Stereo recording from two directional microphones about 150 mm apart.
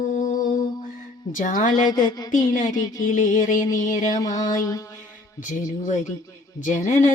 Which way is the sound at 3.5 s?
25° left (ahead or behind).